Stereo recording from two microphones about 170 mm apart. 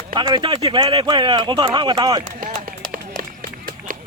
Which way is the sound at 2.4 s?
50° right (ahead or behind).